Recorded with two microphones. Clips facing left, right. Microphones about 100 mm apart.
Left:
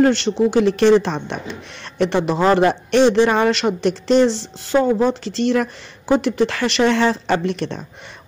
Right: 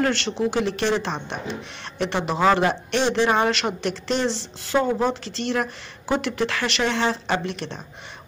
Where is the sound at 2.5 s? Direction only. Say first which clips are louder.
Left 5 dB; 45° left (ahead or behind).